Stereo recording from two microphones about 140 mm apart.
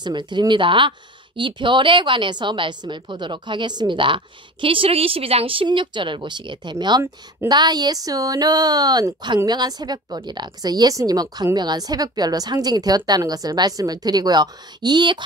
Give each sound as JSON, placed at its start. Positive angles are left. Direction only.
{"t": 0.0, "sound": "a woman's voice", "side_deg": -35}